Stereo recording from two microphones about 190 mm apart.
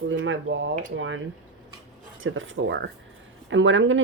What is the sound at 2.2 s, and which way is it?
Speech, 90° right.